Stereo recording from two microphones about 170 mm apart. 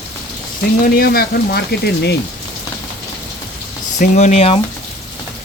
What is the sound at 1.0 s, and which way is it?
Speech, 65° left (ahead or behind).